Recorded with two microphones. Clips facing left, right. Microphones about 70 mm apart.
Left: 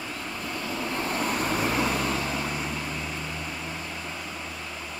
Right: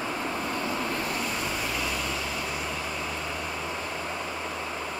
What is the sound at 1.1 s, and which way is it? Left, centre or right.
Vehicle, left.